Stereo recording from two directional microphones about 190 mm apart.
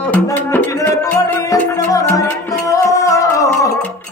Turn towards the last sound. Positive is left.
turn(degrees=15)  # may be behind; listen again after turning